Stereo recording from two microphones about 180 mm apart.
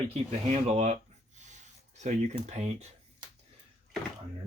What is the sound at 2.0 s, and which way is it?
Speech, 40° right (ahead or behind).